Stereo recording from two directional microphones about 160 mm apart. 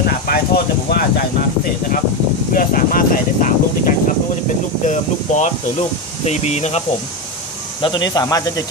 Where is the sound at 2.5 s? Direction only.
60° left (ahead or behind); by 6.8 s 45° left (ahead or behind).